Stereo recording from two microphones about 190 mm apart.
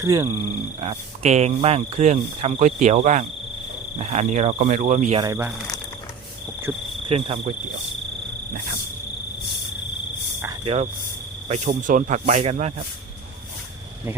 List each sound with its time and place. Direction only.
0.0 s speech: 20° right (ahead or behind)
0.8 s speech: 30° right (ahead or behind)
5.2 s speech: 20° right (ahead or behind)
7.1 s speech: 30° right (ahead or behind)
10.6 s speech: 30° right (ahead or behind)